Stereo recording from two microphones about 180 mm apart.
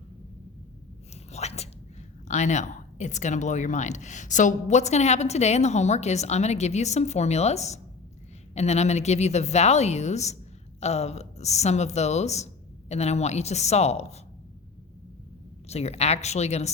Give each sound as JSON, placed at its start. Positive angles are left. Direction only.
{"t": 1.1, "sound": "whispering", "side_deg": 35}
{"t": 2.2, "sound": "a woman's voice", "side_deg": 40}
{"t": 15.7, "sound": "a woman's voice", "side_deg": 35}